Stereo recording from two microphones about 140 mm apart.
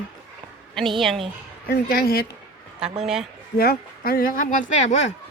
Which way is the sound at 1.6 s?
90° left.